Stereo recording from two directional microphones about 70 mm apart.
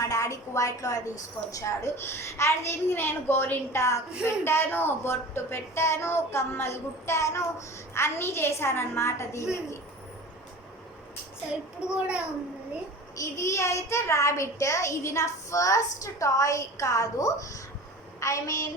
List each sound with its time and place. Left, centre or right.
0.0 s a woman's voice: left
11.8 s a child's voice: centre
13.1 s a child's voice: left